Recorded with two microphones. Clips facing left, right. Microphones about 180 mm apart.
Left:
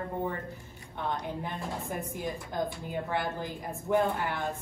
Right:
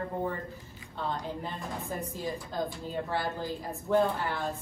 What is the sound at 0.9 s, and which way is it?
A woman's voice, 15° left (ahead or behind).